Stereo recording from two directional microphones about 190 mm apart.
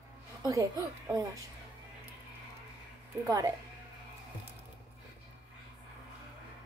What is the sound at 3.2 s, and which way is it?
Speech, 20° right (ahead or behind).